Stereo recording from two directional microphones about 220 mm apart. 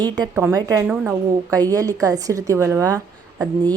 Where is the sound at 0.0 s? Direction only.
15° right (ahead or behind).